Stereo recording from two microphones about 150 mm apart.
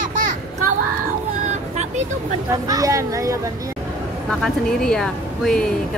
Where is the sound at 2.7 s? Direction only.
20° right (ahead or behind).